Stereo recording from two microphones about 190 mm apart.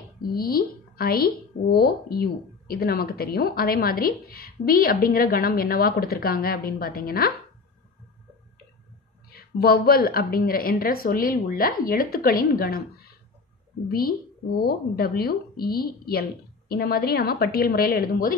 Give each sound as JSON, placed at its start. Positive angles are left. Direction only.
{"t": 0.2, "sound": "a woman's voice", "side_deg": 50}
{"t": 9.3, "sound": "speech", "side_deg": 55}